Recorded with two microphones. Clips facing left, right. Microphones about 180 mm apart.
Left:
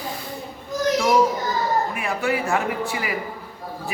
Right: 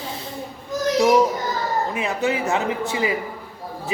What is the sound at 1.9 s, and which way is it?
A man's voice, 20° right (ahead or behind).